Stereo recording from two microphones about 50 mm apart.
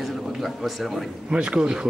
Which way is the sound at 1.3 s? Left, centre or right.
Centre.